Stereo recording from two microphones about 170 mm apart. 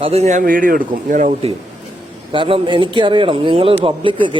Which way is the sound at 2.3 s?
30° right (ahead or behind).